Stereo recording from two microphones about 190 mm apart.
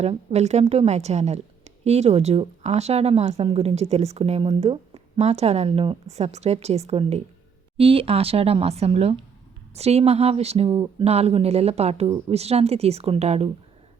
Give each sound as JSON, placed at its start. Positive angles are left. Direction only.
{"t": 0.0, "sound": "a woman's voice", "side_deg": -35}